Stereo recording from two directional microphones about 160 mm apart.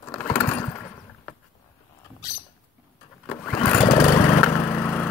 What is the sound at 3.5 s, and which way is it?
Lawn mower, 20° left (ahead or behind).